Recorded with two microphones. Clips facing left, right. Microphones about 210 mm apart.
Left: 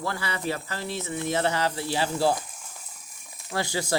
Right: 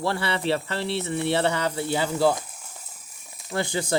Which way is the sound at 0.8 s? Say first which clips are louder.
Right 5 dB; 70° right (ahead or behind).